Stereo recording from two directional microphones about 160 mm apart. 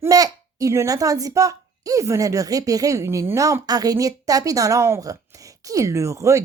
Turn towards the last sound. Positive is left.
turn(degrees=-20)  # may be behind; listen again after turning